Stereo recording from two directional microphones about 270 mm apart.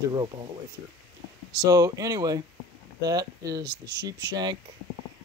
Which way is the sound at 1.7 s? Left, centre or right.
Centre.